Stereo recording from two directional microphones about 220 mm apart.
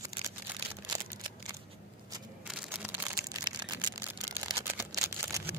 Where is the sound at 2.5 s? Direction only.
5° right (ahead or behind).